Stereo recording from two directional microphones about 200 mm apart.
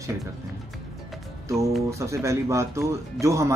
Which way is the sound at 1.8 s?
15° right (ahead or behind).